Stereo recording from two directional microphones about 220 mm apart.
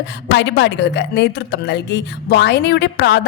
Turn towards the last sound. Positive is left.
turn(degrees=50)  # may be behind; listen again after turning